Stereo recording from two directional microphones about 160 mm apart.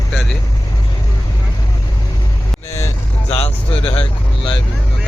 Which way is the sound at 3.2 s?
40° left (ahead or behind).